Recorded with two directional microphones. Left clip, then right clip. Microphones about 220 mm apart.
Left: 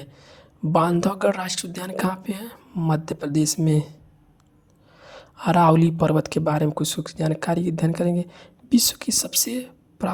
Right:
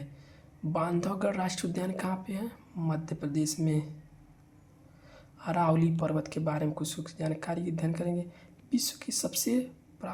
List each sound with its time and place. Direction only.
0.0 s speech: 40° left (ahead or behind)
4.9 s speech: 40° left (ahead or behind)